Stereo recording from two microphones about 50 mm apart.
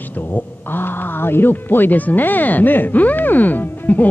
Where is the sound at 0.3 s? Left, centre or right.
Left.